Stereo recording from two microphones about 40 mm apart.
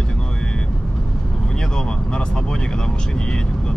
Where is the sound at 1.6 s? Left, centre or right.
Centre.